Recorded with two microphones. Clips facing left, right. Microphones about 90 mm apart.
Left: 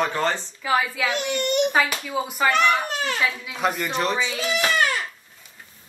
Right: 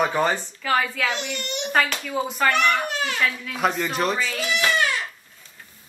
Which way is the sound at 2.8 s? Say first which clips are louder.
Even; 35° left (ahead or behind).